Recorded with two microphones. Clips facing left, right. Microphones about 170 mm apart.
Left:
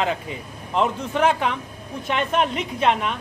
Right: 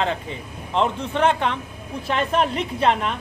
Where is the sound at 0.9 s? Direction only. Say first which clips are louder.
Even; 30° right (ahead or behind).